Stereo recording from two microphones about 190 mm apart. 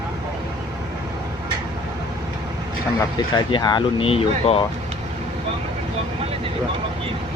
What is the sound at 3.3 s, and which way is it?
Speech, 25° left (ahead or behind).